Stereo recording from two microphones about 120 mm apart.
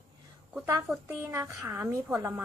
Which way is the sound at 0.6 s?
10° right (ahead or behind).